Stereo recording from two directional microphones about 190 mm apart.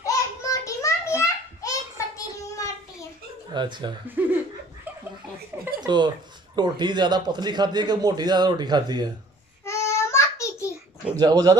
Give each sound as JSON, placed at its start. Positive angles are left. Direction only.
{"t": 0.0, "sound": "a sound", "side_deg": 15}
{"t": 3.5, "sound": "a man's voice", "side_deg": -25}
{"t": 4.0, "sound": "speech", "side_deg": -10}
{"t": 5.8, "sound": "a man's voice", "side_deg": -25}
{"t": 9.6, "sound": "child singing", "side_deg": 15}
{"t": 11.2, "sound": "a man's voice", "side_deg": -20}